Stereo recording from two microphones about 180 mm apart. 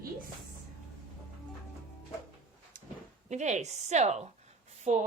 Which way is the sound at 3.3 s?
40° right (ahead or behind).